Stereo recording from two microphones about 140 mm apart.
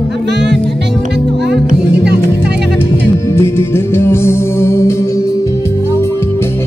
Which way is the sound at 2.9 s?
20° left (ahead or behind).